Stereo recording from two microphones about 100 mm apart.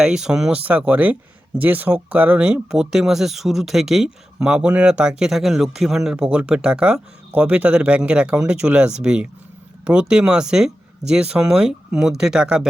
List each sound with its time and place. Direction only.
0.0 s speech: 5° right (ahead or behind)